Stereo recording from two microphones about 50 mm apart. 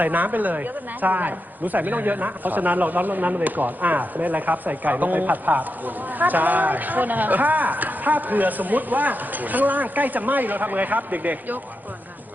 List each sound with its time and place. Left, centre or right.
0.0 s speech: right